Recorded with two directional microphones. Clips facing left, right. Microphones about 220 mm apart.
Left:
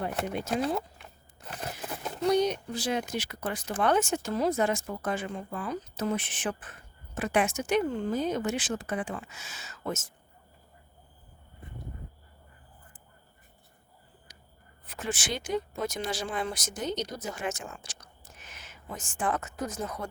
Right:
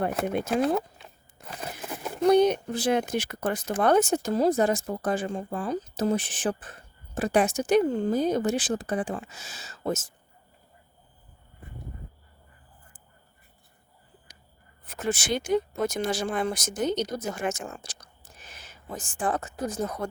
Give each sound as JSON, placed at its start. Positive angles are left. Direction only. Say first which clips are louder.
{"t": 0.0, "sound": "speech", "louder": "right 5 dB", "side_deg": -55}
{"t": 2.2, "sound": "speech", "louder": "right 6 dB", "side_deg": -55}
{"t": 14.3, "sound": "a sound", "louder": "left 1 dB", "side_deg": -50}
{"t": 14.8, "sound": "speech", "louder": "right 6 dB", "side_deg": -45}